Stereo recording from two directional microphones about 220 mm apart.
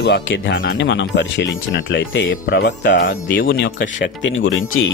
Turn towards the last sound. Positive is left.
turn(degrees=65)  # may be behind; listen again after turning